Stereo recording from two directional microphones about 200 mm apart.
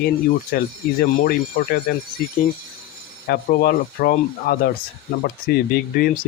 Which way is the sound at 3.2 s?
45° left (ahead or behind).